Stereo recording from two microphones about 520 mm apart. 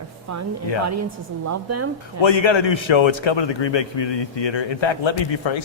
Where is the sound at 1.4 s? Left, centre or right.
Right.